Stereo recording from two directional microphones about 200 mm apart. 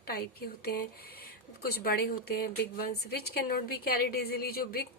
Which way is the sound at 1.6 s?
50° left (ahead or behind).